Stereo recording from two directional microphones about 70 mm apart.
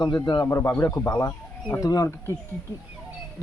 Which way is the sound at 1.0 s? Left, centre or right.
Left.